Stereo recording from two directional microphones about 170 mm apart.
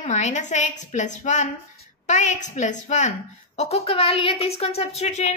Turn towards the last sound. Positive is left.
turn(degrees=40)  # may be behind; listen again after turning